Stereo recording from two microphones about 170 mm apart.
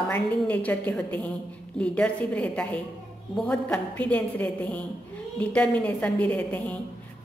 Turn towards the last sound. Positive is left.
turn(degrees=10)  # may be behind; listen again after turning